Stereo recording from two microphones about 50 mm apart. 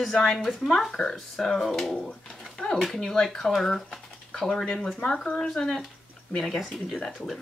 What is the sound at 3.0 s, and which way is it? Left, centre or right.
A woman's voice, centre.